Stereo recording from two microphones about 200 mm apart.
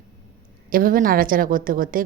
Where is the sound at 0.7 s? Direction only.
45° right (ahead or behind).